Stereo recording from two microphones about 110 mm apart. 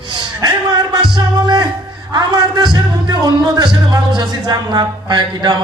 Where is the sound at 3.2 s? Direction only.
40° right (ahead or behind).